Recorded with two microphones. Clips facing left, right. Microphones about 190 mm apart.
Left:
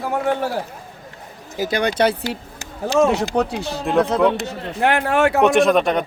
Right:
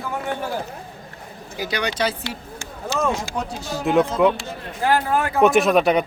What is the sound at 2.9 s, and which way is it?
Speech, 75° left (ahead or behind).